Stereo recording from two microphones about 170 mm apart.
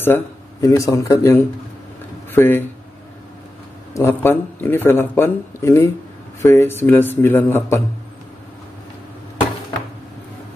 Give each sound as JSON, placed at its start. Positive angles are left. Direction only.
{"t": 0.0, "sound": "speech", "side_deg": 15}
{"t": 3.9, "sound": "speech", "side_deg": 15}